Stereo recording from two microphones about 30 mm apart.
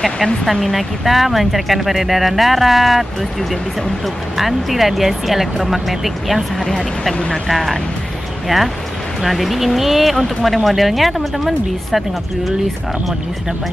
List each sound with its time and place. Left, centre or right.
0.0 s speech: centre